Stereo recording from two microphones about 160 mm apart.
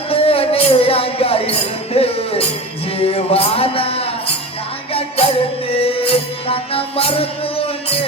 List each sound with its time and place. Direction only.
0.1 s music: 35° left (ahead or behind)